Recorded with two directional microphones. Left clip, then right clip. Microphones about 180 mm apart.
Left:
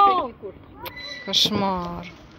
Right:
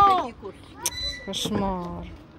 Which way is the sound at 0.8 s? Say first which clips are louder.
Right 4 dB; 10° right (ahead or behind).